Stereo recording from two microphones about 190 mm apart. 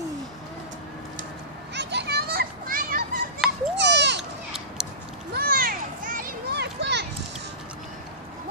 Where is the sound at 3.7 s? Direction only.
65° right (ahead or behind).